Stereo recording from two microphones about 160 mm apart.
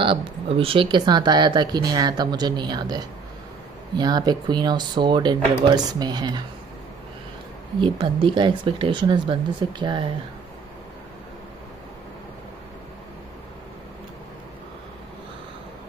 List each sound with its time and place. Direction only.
0.0 s speech: 35° right (ahead or behind)
4.0 s speech: 25° right (ahead or behind)
7.8 s speech: 30° right (ahead or behind)